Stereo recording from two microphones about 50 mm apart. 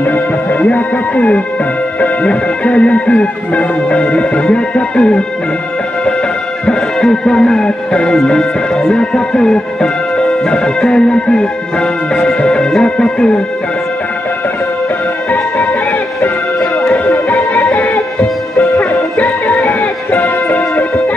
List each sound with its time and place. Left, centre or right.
0.0 s music: left
2.0 s speech: left
6.6 s music: centre
8.9 s speech: centre
15.3 s music: left
16.9 s music: left